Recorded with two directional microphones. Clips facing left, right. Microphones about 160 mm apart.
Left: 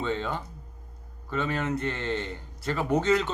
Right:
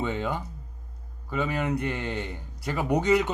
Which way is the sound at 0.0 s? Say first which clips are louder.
Right 1 dB; 10° right (ahead or behind).